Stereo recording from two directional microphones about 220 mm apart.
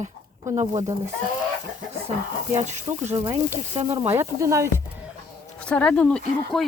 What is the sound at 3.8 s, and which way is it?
Speech, 25° right (ahead or behind).